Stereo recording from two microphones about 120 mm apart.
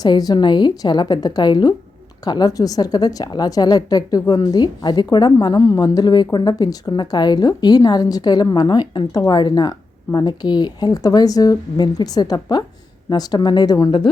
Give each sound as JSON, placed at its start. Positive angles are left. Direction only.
{"t": 0.0, "sound": "a woman's voice", "side_deg": 35}